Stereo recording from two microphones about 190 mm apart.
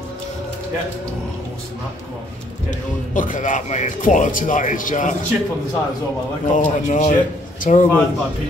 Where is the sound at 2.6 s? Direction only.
45° left (ahead or behind).